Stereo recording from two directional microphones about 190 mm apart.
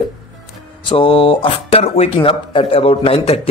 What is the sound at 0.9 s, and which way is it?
Speech, 30° left (ahead or behind).